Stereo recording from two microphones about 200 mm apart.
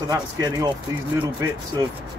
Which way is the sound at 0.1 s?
20° right (ahead or behind).